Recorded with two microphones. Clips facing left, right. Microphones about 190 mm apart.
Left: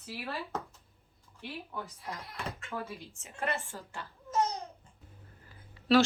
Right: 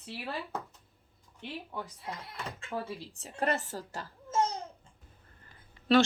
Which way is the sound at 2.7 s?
30° right (ahead or behind).